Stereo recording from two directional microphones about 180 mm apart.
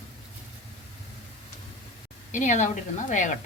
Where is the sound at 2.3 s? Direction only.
45° left (ahead or behind).